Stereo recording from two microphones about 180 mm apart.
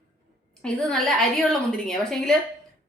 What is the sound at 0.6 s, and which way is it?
A woman's voice, 5° left (ahead or behind).